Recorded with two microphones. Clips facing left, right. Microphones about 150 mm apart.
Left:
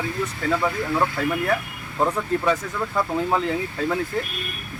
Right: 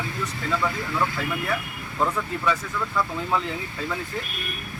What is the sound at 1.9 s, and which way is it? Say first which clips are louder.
Speech: left 3 dB; 25° left (ahead or behind).